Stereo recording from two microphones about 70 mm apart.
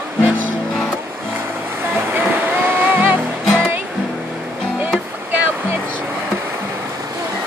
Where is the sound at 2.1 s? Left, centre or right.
Right.